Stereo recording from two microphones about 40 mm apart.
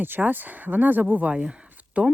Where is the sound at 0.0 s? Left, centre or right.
Right.